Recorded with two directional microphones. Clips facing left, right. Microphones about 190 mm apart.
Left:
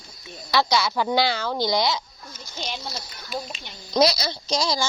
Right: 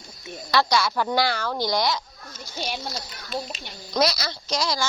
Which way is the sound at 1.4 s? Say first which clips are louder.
Left 1 dB; 20° left (ahead or behind).